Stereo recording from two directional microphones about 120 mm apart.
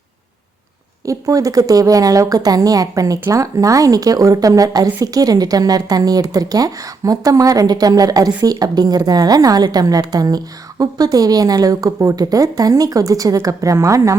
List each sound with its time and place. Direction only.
1.0 s a woman's voice: 30° right (ahead or behind)